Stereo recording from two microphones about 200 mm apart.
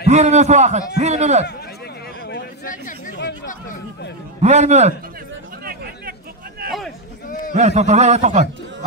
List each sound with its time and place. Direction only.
0.1 s speech: 35° right (ahead or behind)
2.2 s chatter: 45° left (ahead or behind)
4.4 s speech: 35° right (ahead or behind)
6.6 s a sound: 45° right (ahead or behind)
7.5 s speech: 35° right (ahead or behind)